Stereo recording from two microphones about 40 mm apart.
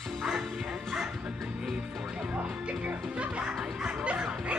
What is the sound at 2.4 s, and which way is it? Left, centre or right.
Music, right.